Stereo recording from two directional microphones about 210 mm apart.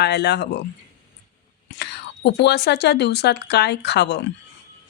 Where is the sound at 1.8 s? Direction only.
55° left (ahead or behind).